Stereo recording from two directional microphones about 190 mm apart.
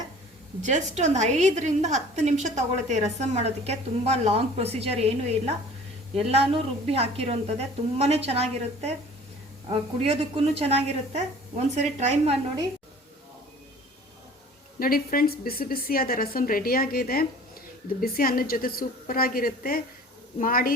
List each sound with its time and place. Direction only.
0.6 s a woman's voice: 40° right (ahead or behind)
14.8 s a woman's voice: 50° left (ahead or behind)